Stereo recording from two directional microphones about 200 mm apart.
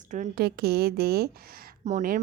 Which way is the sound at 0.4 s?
55° right (ahead or behind).